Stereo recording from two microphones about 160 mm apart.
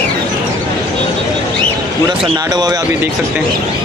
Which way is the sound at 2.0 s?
25° right (ahead or behind).